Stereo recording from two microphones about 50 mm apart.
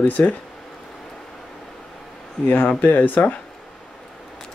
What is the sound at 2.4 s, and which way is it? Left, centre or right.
Speech, centre.